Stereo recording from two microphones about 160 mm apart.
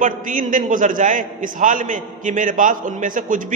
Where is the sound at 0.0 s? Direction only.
55° right (ahead or behind).